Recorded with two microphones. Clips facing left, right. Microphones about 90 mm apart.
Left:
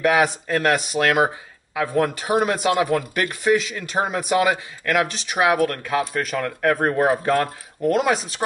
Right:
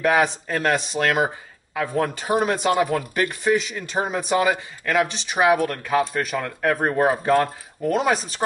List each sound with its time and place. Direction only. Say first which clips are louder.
0.0 s a man's voice: left 1 dB; 5° left (ahead or behind)